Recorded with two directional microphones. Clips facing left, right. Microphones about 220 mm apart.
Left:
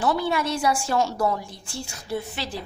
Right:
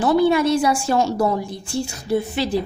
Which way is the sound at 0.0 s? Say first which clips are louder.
Right 8 dB; 20° right (ahead or behind).